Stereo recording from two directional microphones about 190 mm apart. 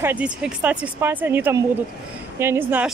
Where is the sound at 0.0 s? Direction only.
5° right (ahead or behind).